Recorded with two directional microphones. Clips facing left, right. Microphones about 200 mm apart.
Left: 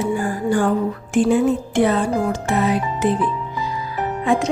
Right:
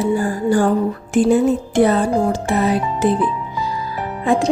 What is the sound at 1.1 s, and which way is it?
Music, 40° right (ahead or behind).